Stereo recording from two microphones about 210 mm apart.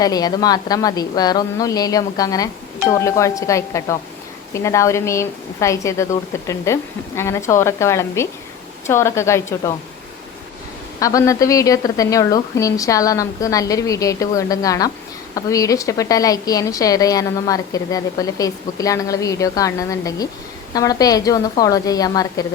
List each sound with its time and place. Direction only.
0.0 s a woman's voice: 20° left (ahead or behind)
11.0 s a woman's voice: 15° left (ahead or behind)